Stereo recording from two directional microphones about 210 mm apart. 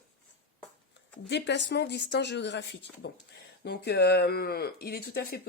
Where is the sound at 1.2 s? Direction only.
55° left (ahead or behind).